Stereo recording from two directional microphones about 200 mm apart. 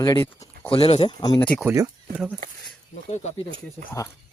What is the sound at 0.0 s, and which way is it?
Speech, 20° left (ahead or behind).